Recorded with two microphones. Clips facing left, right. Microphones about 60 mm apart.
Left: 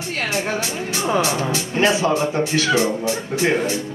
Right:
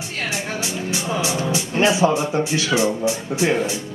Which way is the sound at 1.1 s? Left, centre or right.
Left.